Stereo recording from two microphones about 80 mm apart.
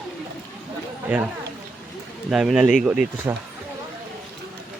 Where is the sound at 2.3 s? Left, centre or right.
Centre.